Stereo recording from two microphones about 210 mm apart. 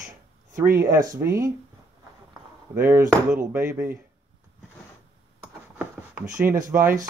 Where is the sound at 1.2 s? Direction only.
15° right (ahead or behind).